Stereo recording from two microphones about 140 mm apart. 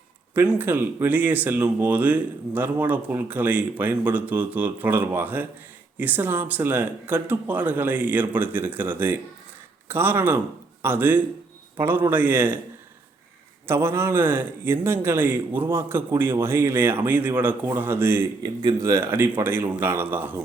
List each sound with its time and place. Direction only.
0.3 s speech: 10° right (ahead or behind)
13.7 s speech: 20° right (ahead or behind)